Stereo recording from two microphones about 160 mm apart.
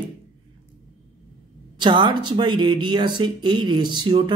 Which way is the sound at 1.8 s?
30° right (ahead or behind).